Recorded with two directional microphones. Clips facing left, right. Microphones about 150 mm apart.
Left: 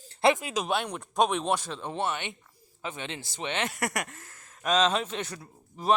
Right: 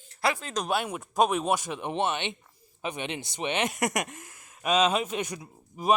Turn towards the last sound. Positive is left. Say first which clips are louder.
# right 1 dB
turn(degrees=-10)  # may be behind; listen again after turning